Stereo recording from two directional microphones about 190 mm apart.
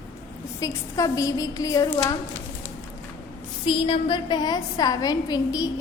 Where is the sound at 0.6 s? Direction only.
20° left (ahead or behind).